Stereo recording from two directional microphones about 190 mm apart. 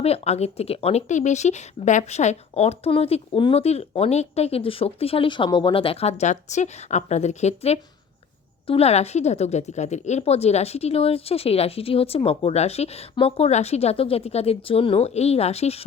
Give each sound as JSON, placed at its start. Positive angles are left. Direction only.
{"t": 0.0, "sound": "speech", "side_deg": 35}